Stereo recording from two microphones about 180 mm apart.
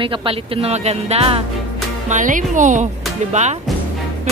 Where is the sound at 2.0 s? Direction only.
45° right (ahead or behind).